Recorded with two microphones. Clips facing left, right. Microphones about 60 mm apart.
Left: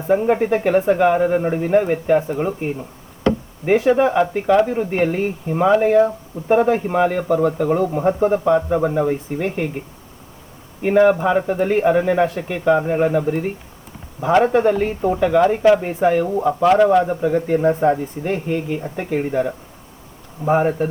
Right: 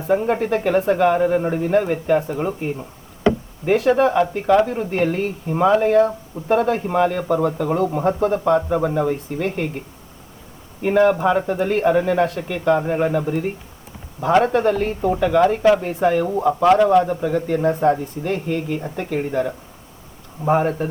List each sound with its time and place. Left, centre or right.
0.1 s speech: centre
3.7 s speech: centre
10.8 s speech: centre
16.7 s speech: centre